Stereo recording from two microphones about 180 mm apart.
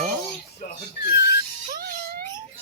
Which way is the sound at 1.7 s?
55° right (ahead or behind).